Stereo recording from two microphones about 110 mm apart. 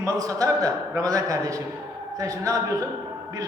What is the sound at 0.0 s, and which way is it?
A man's voice, 30° right (ahead or behind).